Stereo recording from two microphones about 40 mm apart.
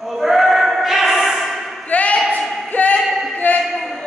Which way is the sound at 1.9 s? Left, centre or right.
Left.